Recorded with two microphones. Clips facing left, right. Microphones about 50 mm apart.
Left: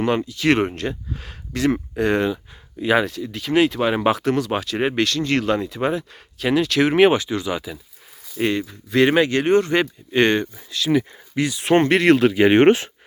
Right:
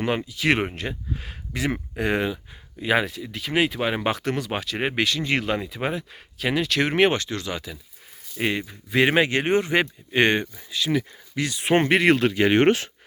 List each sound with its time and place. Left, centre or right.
0.0 s speech: centre
8.4 s speech: centre
12.1 s speech: centre
12.4 s speech: left